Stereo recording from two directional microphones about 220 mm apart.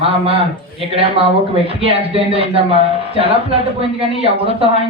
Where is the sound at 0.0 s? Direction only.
25° right (ahead or behind).